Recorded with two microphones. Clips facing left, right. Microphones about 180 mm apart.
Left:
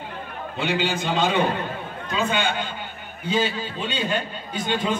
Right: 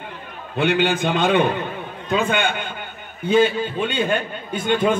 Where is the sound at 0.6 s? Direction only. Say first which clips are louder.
Right 6 dB; 55° right (ahead or behind).